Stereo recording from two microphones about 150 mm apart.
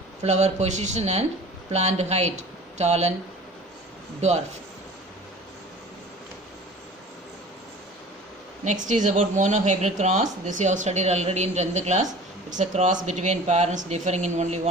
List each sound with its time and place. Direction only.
0.2 s a woman's voice: 50° right (ahead or behind)
4.2 s a woman's voice: 45° right (ahead or behind)
8.6 s a woman's voice: 55° right (ahead or behind)